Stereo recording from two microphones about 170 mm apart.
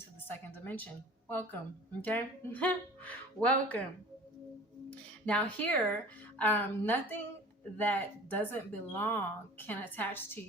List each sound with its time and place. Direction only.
0.3 s a sound: 10° left (ahead or behind)
1.3 s speech: 10° left (ahead or behind)
4.9 s speech: 5° left (ahead or behind)